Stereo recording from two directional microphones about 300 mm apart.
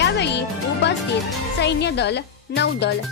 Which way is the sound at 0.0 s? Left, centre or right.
Left.